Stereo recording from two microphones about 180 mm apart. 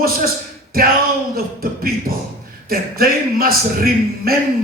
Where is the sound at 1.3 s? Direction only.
55° right (ahead or behind).